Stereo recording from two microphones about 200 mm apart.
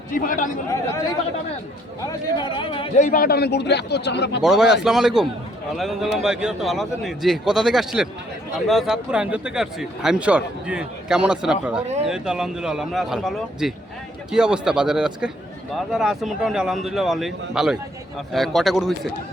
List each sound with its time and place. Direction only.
0.1 s a man's voice: 45° left (ahead or behind)
2.0 s speech: 25° left (ahead or behind)
3.0 s speech: 45° left (ahead or behind); by 4.4 s 60° left (ahead or behind)
4.4 s speech: centre (ahead or behind)